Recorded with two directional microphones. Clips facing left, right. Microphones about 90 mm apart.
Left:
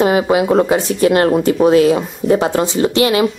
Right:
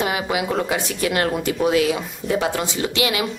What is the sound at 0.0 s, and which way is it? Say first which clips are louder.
Speech: left 9 dB; 35° left (ahead or behind).